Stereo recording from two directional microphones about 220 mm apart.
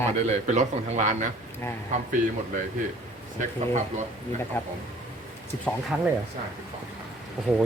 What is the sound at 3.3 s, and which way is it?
Speech, 30° right (ahead or behind).